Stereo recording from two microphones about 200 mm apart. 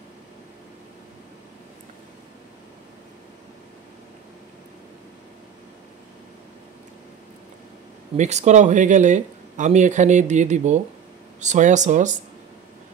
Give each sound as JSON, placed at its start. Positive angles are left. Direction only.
{"t": 8.2, "sound": "speech", "side_deg": -35}